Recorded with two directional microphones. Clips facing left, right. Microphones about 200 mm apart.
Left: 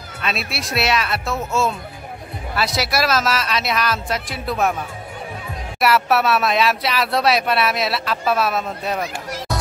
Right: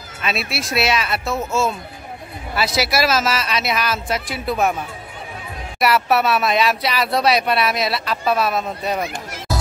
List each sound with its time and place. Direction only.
0.2 s speech: centre (ahead or behind)
5.8 s speech: centre (ahead or behind)